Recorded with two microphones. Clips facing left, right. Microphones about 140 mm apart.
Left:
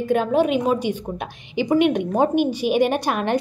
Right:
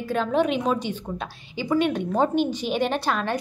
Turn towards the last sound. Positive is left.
turn(degrees=15)  # may be behind; listen again after turning